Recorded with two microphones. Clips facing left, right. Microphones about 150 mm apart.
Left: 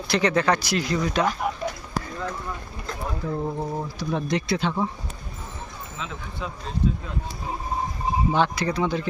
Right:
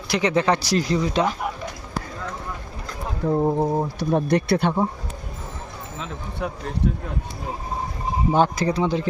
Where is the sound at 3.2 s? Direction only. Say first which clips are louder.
Right 9 dB; 45° right (ahead or behind).